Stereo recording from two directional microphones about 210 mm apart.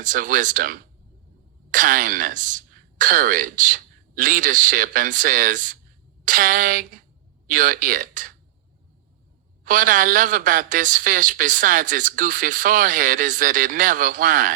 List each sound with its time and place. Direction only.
0.0 s speech: 40° right (ahead or behind)
9.6 s speech: 40° right (ahead or behind)